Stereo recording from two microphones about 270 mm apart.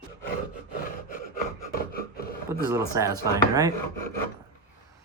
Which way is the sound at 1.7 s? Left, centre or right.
Left.